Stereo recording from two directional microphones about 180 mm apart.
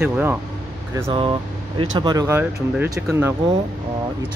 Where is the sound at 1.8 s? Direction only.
25° right (ahead or behind).